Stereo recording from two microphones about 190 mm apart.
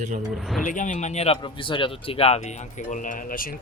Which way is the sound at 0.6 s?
40° left (ahead or behind).